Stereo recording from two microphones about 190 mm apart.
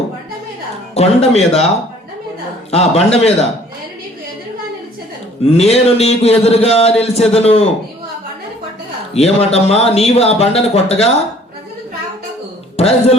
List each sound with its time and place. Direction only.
1.0 s a man's voice: 35° left (ahead or behind)
2.7 s a man's voice: 35° left (ahead or behind)
5.5 s a man's voice: 35° left (ahead or behind)
9.1 s a man's voice: 35° left (ahead or behind)
12.7 s a man's voice: 35° left (ahead or behind)